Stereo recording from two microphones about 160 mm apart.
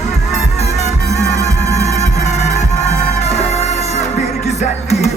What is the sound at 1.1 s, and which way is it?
Music, 45° left (ahead or behind).